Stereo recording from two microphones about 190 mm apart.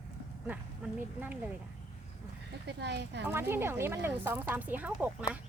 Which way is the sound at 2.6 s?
65° right (ahead or behind).